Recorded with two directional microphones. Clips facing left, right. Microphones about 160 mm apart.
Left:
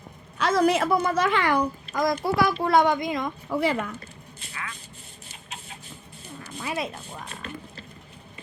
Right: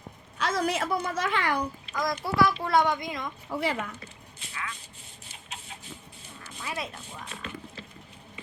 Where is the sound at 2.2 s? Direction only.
45° left (ahead or behind).